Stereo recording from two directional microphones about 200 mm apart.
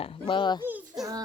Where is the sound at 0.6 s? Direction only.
10° right (ahead or behind).